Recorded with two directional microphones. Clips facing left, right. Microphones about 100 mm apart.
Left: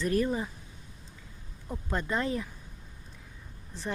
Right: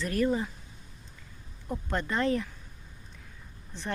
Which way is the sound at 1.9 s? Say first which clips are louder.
Right 2 dB; 10° left (ahead or behind).